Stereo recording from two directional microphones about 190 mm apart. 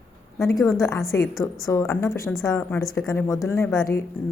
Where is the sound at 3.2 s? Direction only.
15° left (ahead or behind).